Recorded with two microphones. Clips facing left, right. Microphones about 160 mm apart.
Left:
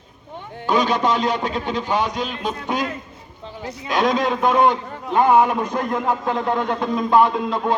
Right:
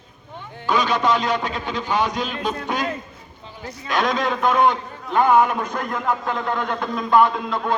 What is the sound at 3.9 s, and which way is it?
A man's voice, 35° left (ahead or behind).